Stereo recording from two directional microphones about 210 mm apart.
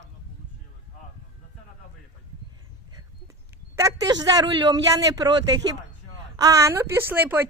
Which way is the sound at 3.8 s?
15° right (ahead or behind).